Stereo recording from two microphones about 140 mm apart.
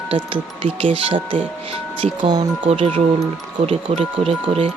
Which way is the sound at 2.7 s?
45° right (ahead or behind).